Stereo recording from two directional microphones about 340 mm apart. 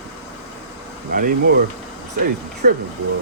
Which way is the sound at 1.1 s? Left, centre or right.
Right.